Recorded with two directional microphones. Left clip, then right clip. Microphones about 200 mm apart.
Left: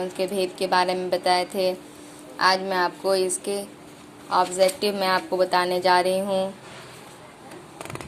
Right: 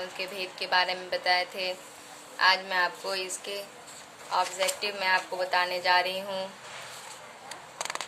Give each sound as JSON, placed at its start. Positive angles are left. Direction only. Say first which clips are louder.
{"t": 0.2, "sound": "speech", "louder": "left 11 dB", "side_deg": 20}